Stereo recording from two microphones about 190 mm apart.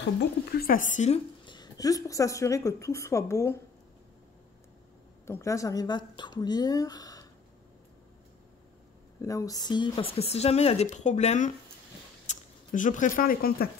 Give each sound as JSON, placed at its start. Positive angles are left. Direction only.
{"t": 0.2, "sound": "a woman's voice", "side_deg": 55}
{"t": 5.2, "sound": "a woman's voice", "side_deg": 15}
{"t": 9.2, "sound": "speech", "side_deg": 15}